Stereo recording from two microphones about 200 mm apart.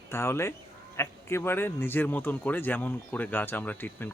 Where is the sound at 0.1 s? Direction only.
15° left (ahead or behind).